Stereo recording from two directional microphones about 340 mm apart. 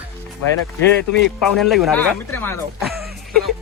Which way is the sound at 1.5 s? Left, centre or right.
Centre.